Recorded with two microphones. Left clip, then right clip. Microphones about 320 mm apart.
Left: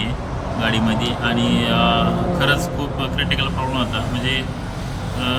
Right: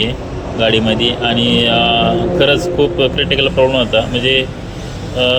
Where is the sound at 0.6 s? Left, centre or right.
Centre.